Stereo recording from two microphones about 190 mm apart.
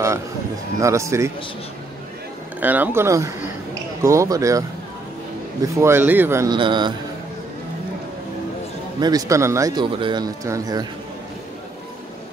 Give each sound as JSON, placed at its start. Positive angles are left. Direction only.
{"t": 0.7, "sound": "speech", "side_deg": -15}
{"t": 2.6, "sound": "speech", "side_deg": -10}
{"t": 5.8, "sound": "speech", "side_deg": -10}
{"t": 9.0, "sound": "speech", "side_deg": -20}